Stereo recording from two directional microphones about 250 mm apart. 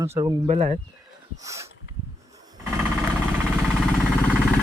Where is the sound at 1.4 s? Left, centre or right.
Centre.